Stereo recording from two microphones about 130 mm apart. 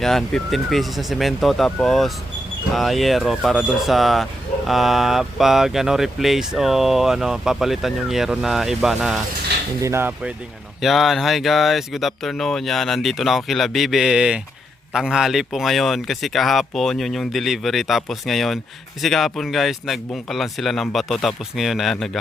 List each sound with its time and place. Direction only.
0.0 s speech: 5° left (ahead or behind)
9.8 s speech: 20° right (ahead or behind)
10.8 s speech: centre (ahead or behind)